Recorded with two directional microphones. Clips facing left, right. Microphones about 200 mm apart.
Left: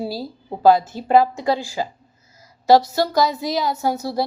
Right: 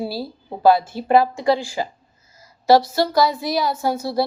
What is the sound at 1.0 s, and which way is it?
A woman's voice, 15° left (ahead or behind).